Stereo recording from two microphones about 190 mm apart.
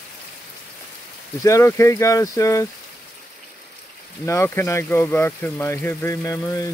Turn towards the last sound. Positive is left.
turn(degrees=15)  # may be behind; listen again after turning